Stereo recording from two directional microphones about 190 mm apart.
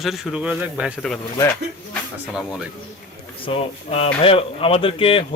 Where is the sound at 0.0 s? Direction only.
Centre (ahead or behind).